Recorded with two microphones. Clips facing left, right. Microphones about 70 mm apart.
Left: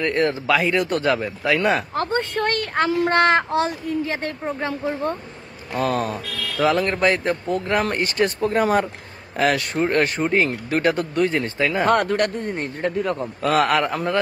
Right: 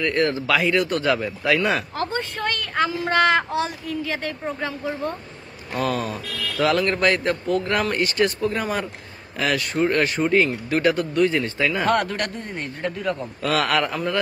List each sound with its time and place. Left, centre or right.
0.0 s speech: left
2.0 s a woman's voice: left
5.8 s speech: left
6.5 s speech: left
8.0 s speech: left